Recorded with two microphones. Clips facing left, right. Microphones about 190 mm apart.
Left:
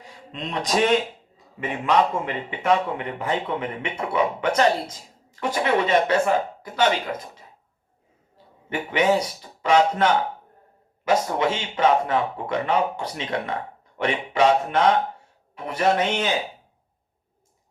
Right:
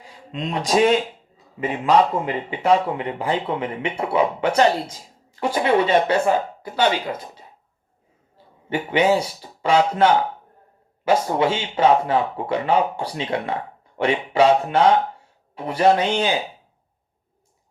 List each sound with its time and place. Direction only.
1.6 s speech: 30° right (ahead or behind)
8.7 s speech: 30° right (ahead or behind)